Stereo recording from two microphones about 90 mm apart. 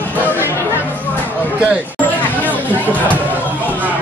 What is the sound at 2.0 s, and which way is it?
Chatter, 20° left (ahead or behind).